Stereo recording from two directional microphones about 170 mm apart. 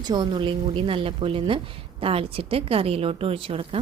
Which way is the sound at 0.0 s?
25° right (ahead or behind).